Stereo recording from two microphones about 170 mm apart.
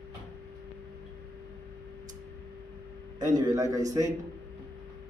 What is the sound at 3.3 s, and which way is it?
Speech, 20° right (ahead or behind).